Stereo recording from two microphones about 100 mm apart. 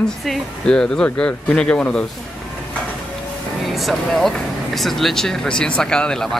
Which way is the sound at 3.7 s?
Centre (ahead or behind).